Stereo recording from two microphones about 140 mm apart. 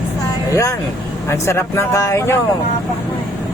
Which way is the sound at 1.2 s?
20° left (ahead or behind).